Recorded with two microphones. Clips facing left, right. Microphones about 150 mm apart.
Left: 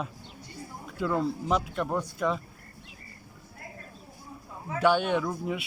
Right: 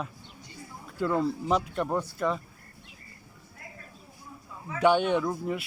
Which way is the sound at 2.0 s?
15° left (ahead or behind).